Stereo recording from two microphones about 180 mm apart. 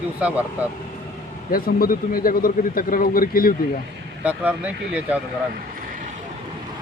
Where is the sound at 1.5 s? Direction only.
55° left (ahead or behind).